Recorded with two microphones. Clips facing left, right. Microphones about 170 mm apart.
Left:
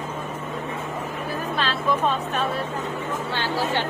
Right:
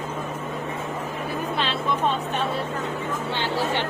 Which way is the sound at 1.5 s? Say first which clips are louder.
Left 3 dB; 20° right (ahead or behind).